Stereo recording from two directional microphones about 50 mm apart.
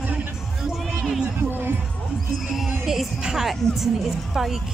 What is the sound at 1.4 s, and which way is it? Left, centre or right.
Music, right.